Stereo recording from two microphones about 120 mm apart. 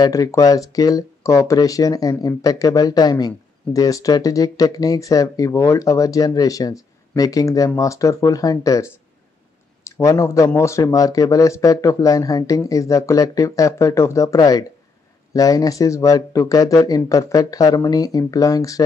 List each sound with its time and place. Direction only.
0.0 s speech: 30° left (ahead or behind)
9.8 s speech: 25° left (ahead or behind)